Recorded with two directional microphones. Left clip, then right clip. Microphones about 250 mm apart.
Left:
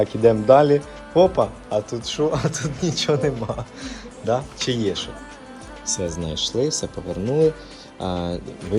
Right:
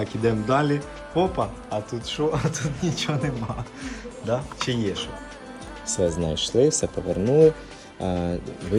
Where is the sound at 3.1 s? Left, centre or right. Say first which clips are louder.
Left 8 dB; left.